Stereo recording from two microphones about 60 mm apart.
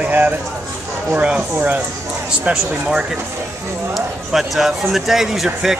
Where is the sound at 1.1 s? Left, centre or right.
Centre.